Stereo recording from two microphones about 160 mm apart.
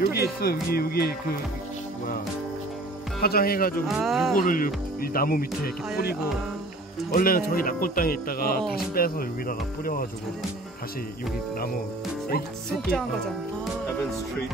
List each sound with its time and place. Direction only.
0.1 s speech: 80° left
3.2 s speech: 70° left (ahead or behind)
3.8 s speech: centre (ahead or behind)
4.4 s speech: 60° left (ahead or behind)
7.1 s speech: 65° left (ahead or behind)